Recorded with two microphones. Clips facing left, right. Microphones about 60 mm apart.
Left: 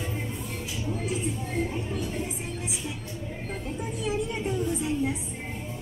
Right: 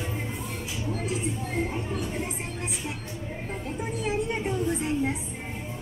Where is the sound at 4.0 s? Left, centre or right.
Right.